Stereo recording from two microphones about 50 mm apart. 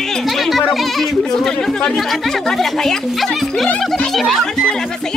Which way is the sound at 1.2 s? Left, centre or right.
Centre.